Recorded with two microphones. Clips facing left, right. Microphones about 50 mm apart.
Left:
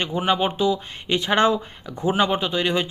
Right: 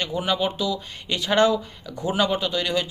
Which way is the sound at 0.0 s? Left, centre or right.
Left.